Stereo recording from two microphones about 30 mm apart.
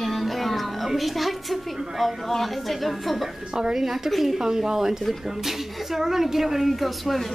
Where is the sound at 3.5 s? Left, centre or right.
Right.